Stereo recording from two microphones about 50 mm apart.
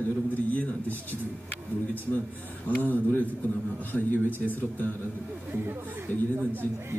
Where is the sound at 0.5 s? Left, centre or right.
Left.